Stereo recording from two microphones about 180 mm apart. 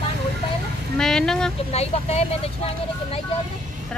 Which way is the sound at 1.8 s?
35° left (ahead or behind).